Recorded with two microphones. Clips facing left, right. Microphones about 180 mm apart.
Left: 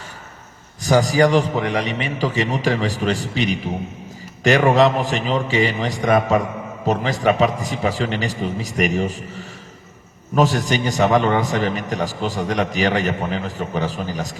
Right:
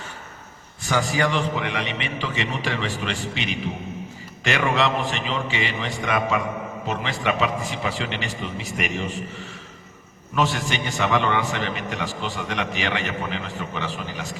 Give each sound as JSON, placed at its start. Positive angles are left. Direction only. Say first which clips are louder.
{"t": 0.8, "sound": "a man's voice", "louder": "left 8 dB", "side_deg": 40}